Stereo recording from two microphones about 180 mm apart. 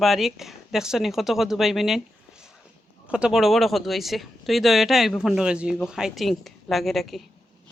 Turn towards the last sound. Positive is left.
turn(degrees=0)  # may be behind; listen again after turning